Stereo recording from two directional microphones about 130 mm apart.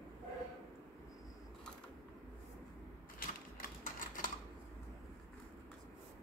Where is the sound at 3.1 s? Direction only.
90° left.